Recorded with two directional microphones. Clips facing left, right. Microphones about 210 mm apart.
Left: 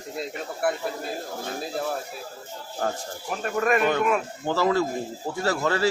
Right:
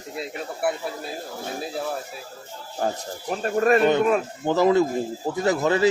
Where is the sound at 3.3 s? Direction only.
35° right (ahead or behind).